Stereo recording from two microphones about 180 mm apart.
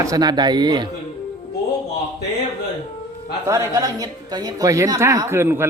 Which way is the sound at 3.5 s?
20° right (ahead or behind).